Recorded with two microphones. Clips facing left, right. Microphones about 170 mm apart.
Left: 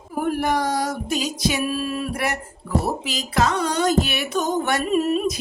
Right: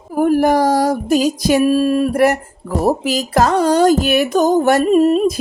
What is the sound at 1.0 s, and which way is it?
Speech, 45° right (ahead or behind).